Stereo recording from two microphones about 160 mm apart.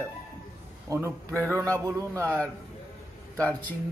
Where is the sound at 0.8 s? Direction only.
15° right (ahead or behind).